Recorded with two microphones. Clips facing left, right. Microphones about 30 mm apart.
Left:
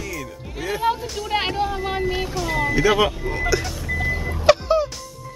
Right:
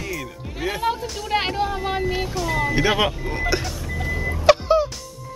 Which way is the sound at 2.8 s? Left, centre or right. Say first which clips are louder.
Left 3 dB; right.